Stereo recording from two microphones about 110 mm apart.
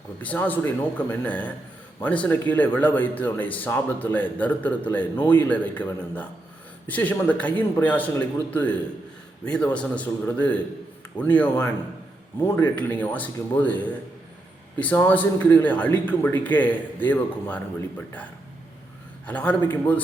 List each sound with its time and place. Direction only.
0.2 s speech: 15° left (ahead or behind)
19.3 s speech: 15° left (ahead or behind)